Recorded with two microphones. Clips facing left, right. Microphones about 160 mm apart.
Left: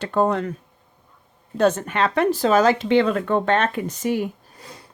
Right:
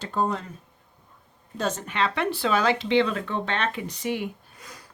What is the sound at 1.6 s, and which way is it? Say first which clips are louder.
Speech: left 8 dB; 60° left (ahead or behind).